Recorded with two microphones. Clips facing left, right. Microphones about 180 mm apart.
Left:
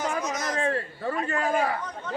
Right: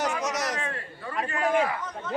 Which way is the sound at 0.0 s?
75° right (ahead or behind).